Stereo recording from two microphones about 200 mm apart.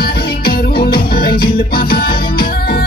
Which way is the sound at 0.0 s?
50° left (ahead or behind).